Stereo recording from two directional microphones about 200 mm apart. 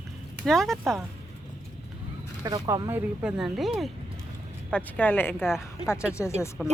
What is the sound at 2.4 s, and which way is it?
Speech, 20° right (ahead or behind).